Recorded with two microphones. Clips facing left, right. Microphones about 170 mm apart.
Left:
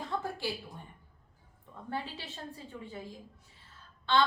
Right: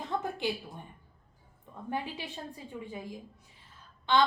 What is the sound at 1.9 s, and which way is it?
A woman's voice, 15° right (ahead or behind).